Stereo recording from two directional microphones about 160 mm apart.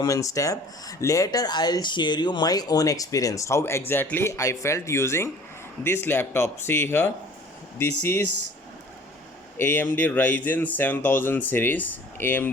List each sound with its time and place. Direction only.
0.0 s speech: 20° left (ahead or behind)
9.6 s speech: 15° left (ahead or behind)